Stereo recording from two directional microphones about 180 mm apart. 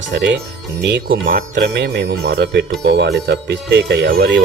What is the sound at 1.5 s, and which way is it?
Speech, 75° right (ahead or behind).